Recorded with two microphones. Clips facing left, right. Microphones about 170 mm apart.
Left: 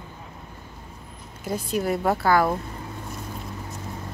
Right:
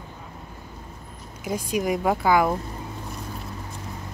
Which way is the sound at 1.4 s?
10° right (ahead or behind).